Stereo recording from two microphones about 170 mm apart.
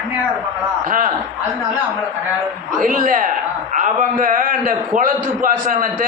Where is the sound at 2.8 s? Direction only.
50° right (ahead or behind).